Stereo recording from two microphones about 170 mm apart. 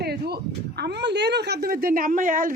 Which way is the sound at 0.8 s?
85° right.